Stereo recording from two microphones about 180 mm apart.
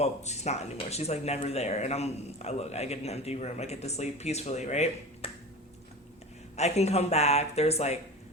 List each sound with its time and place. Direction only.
0.0 s speech: 40° left (ahead or behind)
6.6 s speech: 35° left (ahead or behind)